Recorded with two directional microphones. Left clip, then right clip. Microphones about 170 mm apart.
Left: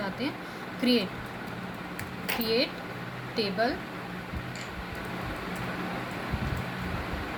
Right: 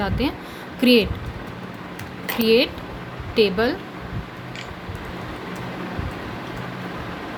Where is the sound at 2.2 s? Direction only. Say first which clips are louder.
Right 10 dB; 50° right (ahead or behind).